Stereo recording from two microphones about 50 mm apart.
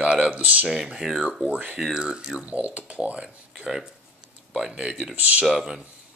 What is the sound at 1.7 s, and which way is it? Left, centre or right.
Speech, centre.